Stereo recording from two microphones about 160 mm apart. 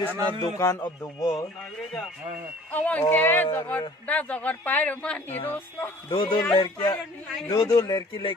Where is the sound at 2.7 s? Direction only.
10° left (ahead or behind).